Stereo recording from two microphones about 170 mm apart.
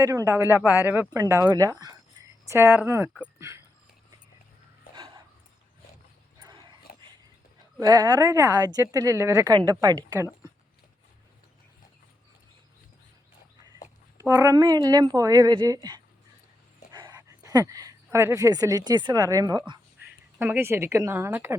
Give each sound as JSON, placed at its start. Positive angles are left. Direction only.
{"t": 0.0, "sound": "speech", "side_deg": -15}
{"t": 1.2, "sound": "speech", "side_deg": -20}
{"t": 6.4, "sound": "dog", "side_deg": -25}
{"t": 7.8, "sound": "speech", "side_deg": -20}
{"t": 13.8, "sound": "speech", "side_deg": -15}
{"t": 20.4, "sound": "speech", "side_deg": -10}